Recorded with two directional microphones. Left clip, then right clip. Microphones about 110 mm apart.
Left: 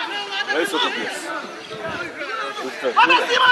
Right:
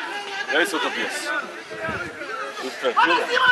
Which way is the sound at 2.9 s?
20° left (ahead or behind).